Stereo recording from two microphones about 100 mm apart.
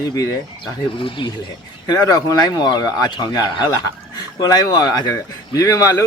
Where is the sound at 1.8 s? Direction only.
40° left (ahead or behind).